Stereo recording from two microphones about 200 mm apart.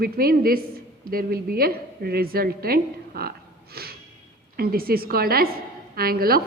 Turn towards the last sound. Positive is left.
turn(degrees=-50)  # may be behind; listen again after turning